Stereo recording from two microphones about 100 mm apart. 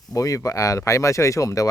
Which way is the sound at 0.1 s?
35° left (ahead or behind).